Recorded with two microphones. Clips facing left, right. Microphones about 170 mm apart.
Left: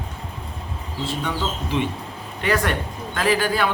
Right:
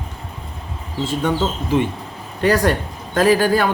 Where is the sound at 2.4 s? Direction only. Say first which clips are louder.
Right 6 dB; 40° right (ahead or behind).